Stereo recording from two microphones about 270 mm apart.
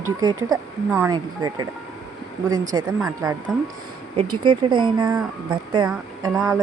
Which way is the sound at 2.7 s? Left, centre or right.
Centre.